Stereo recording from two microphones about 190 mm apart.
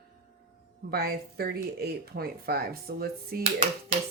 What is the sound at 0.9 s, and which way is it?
Speech, 55° right (ahead or behind).